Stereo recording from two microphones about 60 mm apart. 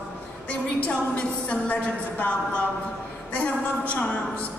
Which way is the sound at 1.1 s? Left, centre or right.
Left.